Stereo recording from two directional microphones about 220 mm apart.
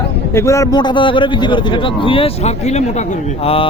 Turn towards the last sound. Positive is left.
turn(degrees=25)  # may be behind; listen again after turning